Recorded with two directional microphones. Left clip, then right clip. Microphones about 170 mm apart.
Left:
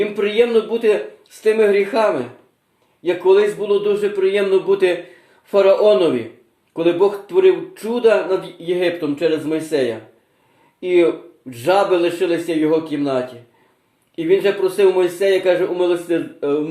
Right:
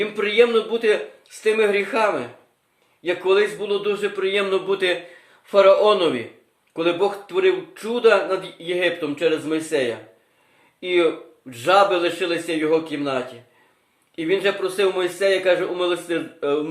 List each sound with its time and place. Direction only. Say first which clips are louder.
0.2 s a man's voice: left 1 dB; 25° right (ahead or behind)
14.2 s a man's voice: left 5 dB; 25° right (ahead or behind)